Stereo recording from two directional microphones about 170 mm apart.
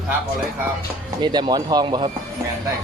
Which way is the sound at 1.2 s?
25° right (ahead or behind).